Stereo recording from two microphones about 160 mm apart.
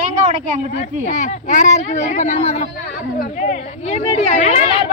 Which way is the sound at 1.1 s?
45° left (ahead or behind).